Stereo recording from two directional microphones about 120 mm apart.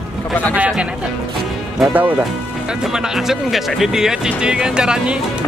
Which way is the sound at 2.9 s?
5° right (ahead or behind).